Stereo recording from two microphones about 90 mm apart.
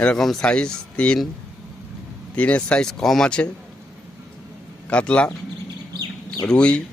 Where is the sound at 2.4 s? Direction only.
15° left (ahead or behind).